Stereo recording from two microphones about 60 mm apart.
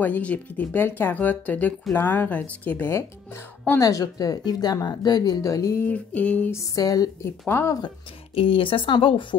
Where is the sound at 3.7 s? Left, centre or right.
Left.